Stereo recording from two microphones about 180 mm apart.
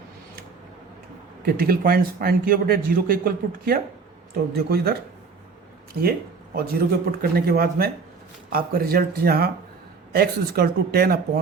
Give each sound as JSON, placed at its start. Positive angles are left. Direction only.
{"t": 1.5, "sound": "a man's voice", "side_deg": -55}
{"t": 6.0, "sound": "a man's voice", "side_deg": -55}